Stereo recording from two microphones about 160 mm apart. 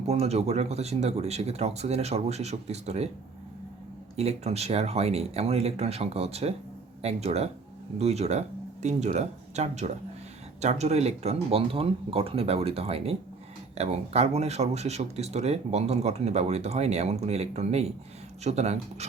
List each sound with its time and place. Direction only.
0.0 s speech: 40° right (ahead or behind)
4.2 s speech: 40° right (ahead or behind)